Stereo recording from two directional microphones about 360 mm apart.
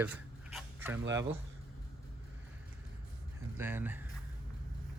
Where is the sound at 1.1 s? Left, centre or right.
Centre.